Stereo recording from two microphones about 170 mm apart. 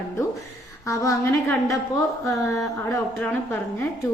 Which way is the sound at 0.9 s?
20° left (ahead or behind).